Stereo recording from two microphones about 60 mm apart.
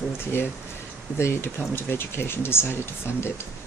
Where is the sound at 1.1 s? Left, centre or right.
Left.